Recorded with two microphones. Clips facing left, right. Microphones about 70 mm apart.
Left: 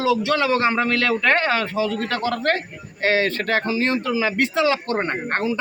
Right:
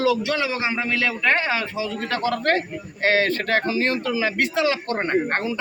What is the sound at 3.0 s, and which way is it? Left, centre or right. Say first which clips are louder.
Speech: even; right.